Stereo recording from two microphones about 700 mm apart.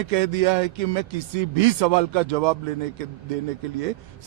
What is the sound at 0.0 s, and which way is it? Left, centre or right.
Speech, right.